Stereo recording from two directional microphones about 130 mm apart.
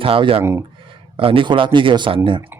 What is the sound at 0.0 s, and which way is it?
Speech, 45° right (ahead or behind).